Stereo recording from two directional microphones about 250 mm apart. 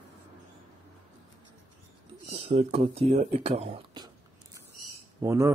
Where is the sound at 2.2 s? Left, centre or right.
Right.